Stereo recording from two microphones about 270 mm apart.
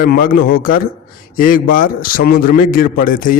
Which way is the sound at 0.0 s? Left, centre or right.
Left.